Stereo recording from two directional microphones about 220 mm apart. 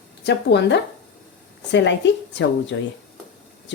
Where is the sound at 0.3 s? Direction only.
50° left (ahead or behind).